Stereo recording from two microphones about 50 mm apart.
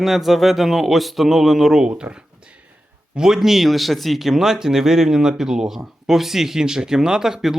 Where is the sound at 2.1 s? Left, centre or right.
Right.